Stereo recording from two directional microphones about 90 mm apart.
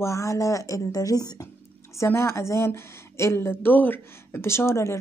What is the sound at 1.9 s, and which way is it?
A woman's voice, 30° left (ahead or behind).